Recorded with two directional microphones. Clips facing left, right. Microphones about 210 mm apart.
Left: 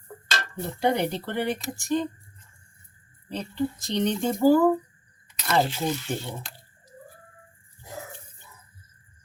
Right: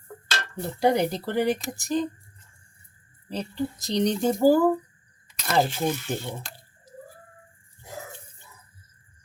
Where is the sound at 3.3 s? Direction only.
35° right (ahead or behind).